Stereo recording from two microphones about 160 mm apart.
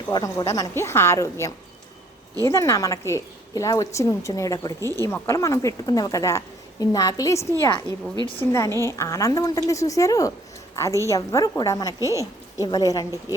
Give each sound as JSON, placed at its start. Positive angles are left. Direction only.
{"t": 0.1, "sound": "a woman's voice", "side_deg": 25}
{"t": 7.9, "sound": "a woman's voice", "side_deg": -25}
{"t": 8.5, "sound": "a woman's voice", "side_deg": 15}